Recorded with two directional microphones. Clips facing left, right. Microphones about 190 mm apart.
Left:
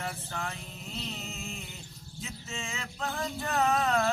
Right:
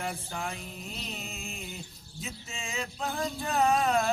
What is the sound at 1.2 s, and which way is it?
Music, 15° right (ahead or behind).